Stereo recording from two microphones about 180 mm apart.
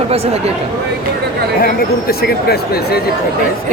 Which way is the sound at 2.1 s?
60° left (ahead or behind).